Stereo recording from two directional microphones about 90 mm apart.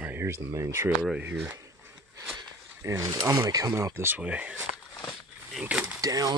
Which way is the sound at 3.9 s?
20° right (ahead or behind).